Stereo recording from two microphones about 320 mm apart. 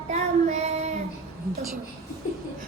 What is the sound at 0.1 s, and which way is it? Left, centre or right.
Child singing, right.